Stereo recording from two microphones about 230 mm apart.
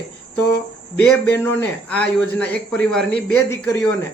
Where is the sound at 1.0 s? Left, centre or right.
Centre.